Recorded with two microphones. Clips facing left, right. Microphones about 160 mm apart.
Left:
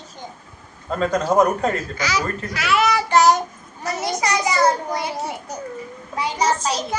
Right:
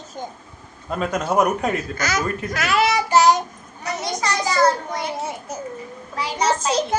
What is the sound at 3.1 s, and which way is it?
Child singing, centre (ahead or behind).